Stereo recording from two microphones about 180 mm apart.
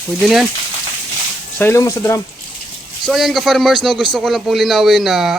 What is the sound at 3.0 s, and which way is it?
A man's voice, centre (ahead or behind).